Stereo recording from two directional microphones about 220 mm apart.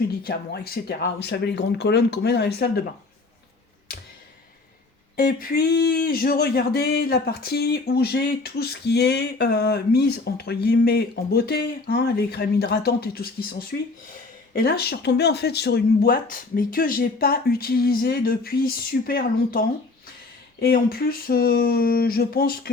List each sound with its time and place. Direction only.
0.2 s speech: 45° left (ahead or behind)
5.1 s speech: 40° left (ahead or behind)